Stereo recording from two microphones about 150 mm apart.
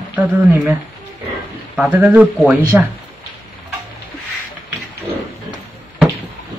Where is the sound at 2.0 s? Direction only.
10° right (ahead or behind).